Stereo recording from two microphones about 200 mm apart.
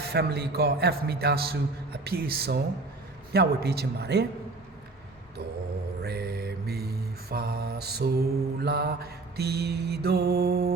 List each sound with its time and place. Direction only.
0.0 s a man's voice: 50° right (ahead or behind)
6.0 s mantra: 50° right (ahead or behind)